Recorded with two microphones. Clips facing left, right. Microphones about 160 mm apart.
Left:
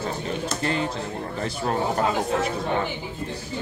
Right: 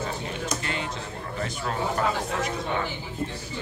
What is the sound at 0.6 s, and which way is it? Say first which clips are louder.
A man's voice: left 6 dB; 35° left (ahead or behind).